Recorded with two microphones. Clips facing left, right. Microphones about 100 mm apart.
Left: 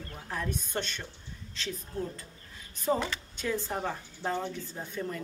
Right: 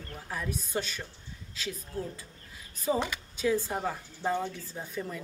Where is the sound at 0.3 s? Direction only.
5° right (ahead or behind).